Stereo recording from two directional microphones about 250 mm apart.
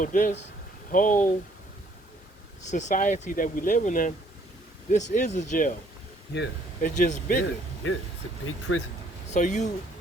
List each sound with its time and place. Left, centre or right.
0.0 s speech: left
2.6 s speech: left
6.3 s speech: left
6.9 s speech: left
7.8 s speech: left
9.3 s speech: left